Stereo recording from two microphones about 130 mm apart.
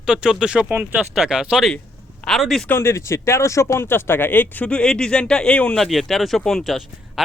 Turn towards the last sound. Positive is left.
turn(degrees=0)  # may be behind; listen again after turning